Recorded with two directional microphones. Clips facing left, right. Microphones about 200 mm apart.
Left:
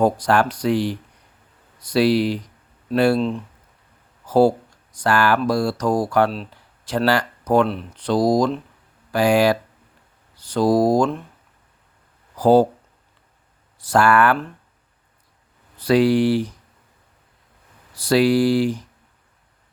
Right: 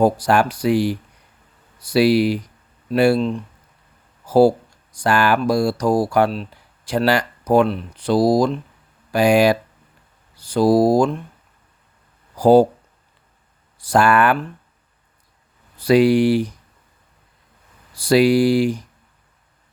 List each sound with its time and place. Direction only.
0.0 s speech: 10° right (ahead or behind)
3.2 s speech: centre (ahead or behind)
7.7 s speech: centre (ahead or behind)
9.1 s speech: 15° right (ahead or behind)
12.4 s speech: 10° right (ahead or behind)
13.7 s speech: 15° right (ahead or behind)
15.8 s speech: 10° right (ahead or behind)
17.9 s speech: 10° right (ahead or behind)